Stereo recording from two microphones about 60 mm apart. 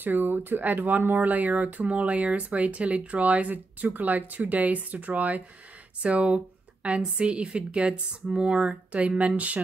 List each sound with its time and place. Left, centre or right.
0.0 s speech: right